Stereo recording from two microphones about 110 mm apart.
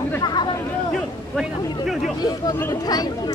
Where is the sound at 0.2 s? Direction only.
40° left (ahead or behind).